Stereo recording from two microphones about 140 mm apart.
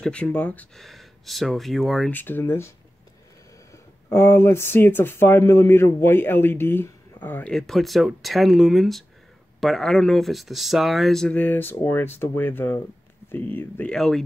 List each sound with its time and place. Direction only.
0.0 s speech: 10° left (ahead or behind)
2.0 s speech: 15° left (ahead or behind)
3.7 s speech: 20° left (ahead or behind)